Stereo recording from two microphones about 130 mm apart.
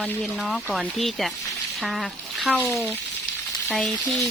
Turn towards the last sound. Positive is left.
turn(degrees=0)  # may be behind; listen again after turning